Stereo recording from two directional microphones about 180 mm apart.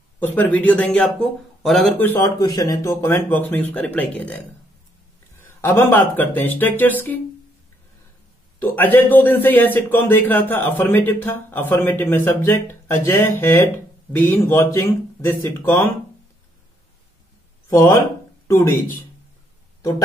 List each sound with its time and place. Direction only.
0.2 s a man's voice: 10° left (ahead or behind)
2.4 s a man's voice: 20° left (ahead or behind)
5.6 s a man's voice: 10° left (ahead or behind)
8.5 s a man's voice: 10° left (ahead or behind)
17.6 s a man's voice: 15° left (ahead or behind)